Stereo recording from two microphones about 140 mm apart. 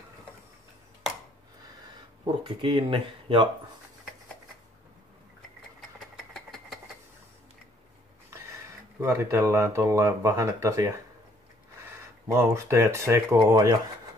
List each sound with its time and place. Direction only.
2.4 s speech: 40° right (ahead or behind)
5.9 s engine: centre (ahead or behind)
9.0 s speech: 20° right (ahead or behind)
12.4 s speech: 20° right (ahead or behind)